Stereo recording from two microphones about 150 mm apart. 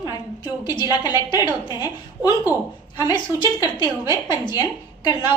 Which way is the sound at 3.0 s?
25° left (ahead or behind).